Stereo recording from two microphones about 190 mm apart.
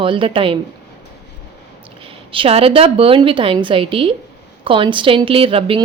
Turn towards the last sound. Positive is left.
turn(degrees=-30)  # may be behind; listen again after turning